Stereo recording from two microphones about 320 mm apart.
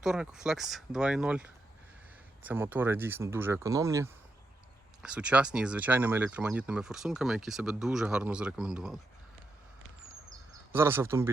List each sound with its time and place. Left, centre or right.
0.0 s speech: centre
10.7 s speech: centre